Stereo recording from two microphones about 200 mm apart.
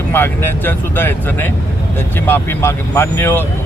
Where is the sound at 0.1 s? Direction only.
10° left (ahead or behind).